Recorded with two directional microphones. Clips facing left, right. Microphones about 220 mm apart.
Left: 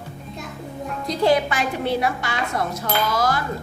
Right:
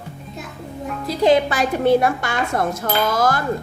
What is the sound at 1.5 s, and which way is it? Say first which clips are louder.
Speech: right 7 dB; 45° right (ahead or behind).